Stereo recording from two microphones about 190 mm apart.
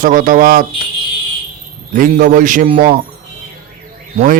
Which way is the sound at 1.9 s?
45° right (ahead or behind).